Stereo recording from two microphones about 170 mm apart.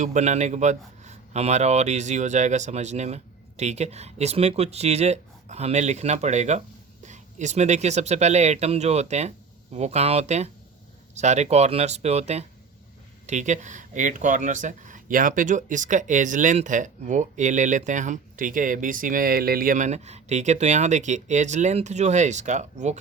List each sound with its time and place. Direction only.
0.0 s speech: 45° right (ahead or behind)